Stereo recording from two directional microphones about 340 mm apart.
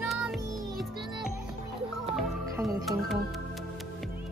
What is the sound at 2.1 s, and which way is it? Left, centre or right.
Music, centre.